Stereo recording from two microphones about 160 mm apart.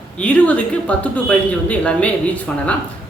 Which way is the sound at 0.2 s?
10° left (ahead or behind).